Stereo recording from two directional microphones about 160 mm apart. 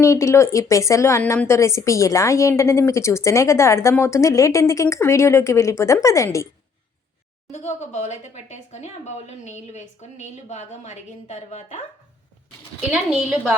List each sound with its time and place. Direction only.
0.0 s a woman's voice: 20° left (ahead or behind)
7.5 s speech: 45° left (ahead or behind)
12.9 s a woman's voice: 5° right (ahead or behind)